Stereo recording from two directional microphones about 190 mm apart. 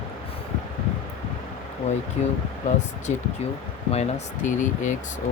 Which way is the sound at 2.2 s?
40° left (ahead or behind).